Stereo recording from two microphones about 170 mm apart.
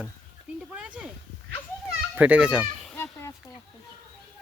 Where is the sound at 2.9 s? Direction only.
15° left (ahead or behind).